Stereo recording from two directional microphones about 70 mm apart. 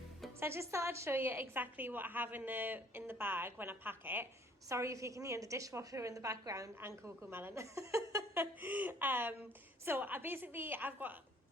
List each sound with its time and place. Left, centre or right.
0.3 s a woman's voice: right
4.7 s a woman's voice: right
6.7 s a woman's voice: right
7.5 s a woman's voice: right
8.4 s a woman's voice: right